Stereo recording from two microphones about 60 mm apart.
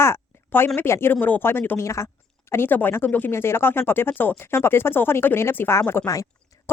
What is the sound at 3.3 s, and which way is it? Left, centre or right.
Speech, left.